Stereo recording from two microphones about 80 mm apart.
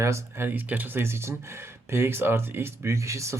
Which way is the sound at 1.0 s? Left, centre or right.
Right.